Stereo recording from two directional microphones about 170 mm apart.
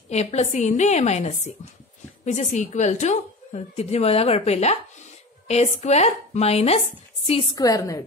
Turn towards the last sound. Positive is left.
turn(degrees=20)  # may be behind; listen again after turning